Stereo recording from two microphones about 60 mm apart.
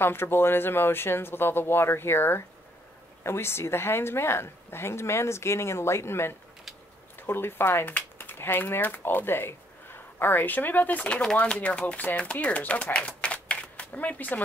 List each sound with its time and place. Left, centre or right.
0.0 s speech: left